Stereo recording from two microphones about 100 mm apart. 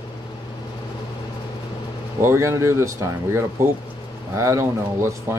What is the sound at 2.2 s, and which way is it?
Speech, 30° right (ahead or behind).